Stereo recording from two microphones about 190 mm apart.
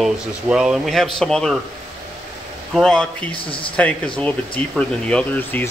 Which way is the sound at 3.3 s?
25° left (ahead or behind).